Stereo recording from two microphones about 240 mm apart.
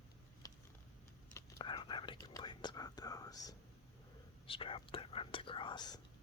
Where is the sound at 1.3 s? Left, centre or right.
Centre.